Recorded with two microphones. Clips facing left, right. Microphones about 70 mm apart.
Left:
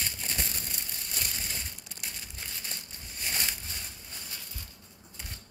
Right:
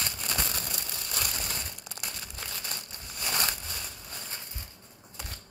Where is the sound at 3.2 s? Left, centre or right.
Right.